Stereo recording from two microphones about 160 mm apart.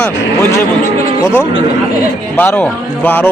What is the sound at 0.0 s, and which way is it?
A man's voice, 10° left (ahead or behind).